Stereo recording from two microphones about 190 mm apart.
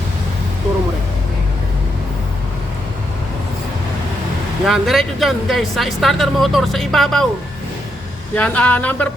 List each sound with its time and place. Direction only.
4.6 s speech: centre (ahead or behind)
8.4 s speech: 5° left (ahead or behind)